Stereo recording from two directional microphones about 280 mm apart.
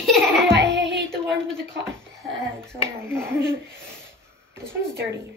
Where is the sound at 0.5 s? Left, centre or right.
Right.